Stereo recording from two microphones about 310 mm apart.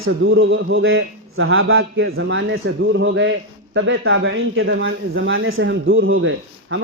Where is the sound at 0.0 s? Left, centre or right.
Right.